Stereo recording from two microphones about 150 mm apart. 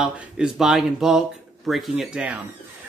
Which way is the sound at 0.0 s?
5° right (ahead or behind).